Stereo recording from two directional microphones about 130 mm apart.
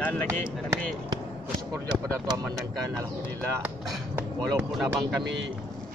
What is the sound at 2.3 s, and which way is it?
Speech, 25° right (ahead or behind).